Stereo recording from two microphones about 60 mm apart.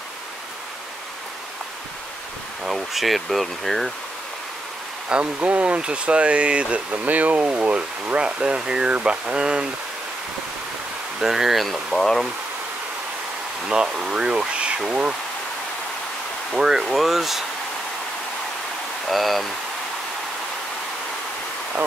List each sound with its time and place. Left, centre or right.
2.6 s speech: centre
5.1 s speech: right
11.1 s speech: centre
13.7 s speech: centre
16.5 s speech: centre
19.0 s speech: centre